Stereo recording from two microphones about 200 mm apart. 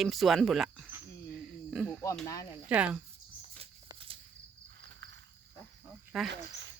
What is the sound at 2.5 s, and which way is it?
Speech, 5° right (ahead or behind).